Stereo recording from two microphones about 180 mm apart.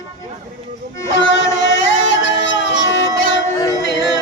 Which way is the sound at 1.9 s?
90° left.